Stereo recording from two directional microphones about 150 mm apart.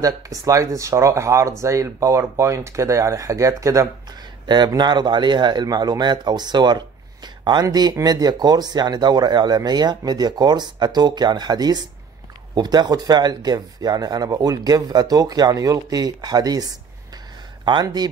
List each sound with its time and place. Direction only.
0.0 s speech: 20° right (ahead or behind)